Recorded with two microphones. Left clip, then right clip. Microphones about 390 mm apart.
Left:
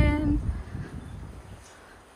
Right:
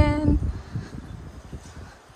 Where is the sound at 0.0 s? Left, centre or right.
Centre.